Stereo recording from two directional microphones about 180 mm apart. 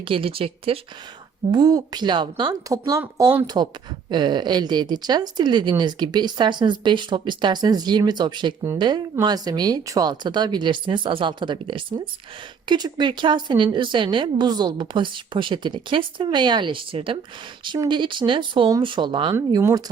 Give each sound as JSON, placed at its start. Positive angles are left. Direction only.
{"t": 0.0, "sound": "a woman's voice", "side_deg": -30}